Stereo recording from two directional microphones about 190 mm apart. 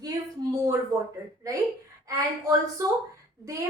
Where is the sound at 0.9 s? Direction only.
15° right (ahead or behind).